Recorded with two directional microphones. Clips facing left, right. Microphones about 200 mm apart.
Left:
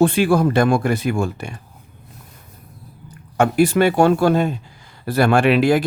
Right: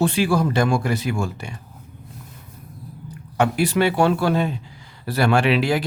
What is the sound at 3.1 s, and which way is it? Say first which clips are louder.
Speech: left 3 dB; 50° left (ahead or behind).